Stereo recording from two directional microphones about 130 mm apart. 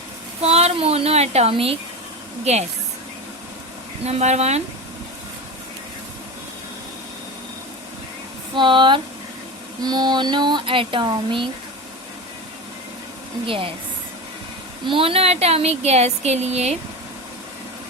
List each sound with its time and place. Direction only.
0.4 s speech: 55° right (ahead or behind)
2.4 s speech: 60° right (ahead or behind)
4.0 s speech: 55° right (ahead or behind)
8.5 s speech: 40° right (ahead or behind)
14.8 s speech: 45° right (ahead or behind); by 16.7 s 60° right (ahead or behind)